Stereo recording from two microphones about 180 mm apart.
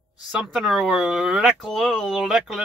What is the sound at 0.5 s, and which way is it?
Speech, 5° right (ahead or behind).